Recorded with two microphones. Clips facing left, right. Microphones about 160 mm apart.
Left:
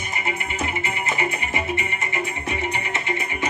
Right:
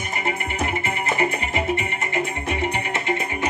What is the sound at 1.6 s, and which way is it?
Music, 55° right (ahead or behind).